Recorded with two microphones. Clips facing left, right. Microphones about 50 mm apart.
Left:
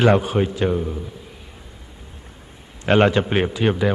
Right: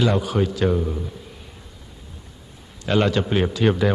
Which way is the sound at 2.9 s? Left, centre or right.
Left.